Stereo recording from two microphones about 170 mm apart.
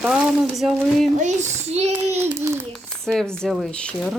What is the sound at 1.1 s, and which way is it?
Speech, 45° right (ahead or behind).